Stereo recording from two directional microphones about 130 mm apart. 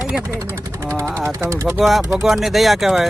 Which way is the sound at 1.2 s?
20° right (ahead or behind).